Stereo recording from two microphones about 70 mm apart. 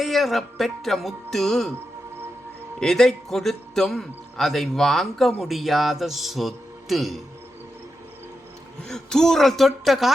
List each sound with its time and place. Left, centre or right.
0.0 s a man's voice: centre
2.8 s a man's voice: centre
8.8 s a man's voice: centre